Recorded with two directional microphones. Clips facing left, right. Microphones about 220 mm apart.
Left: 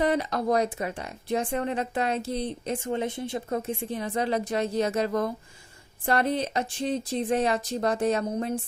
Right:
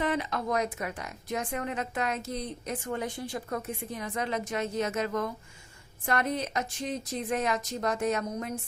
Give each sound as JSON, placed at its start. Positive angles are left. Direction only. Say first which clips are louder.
{"t": 0.0, "sound": "speech", "louder": "left 5 dB", "side_deg": 40}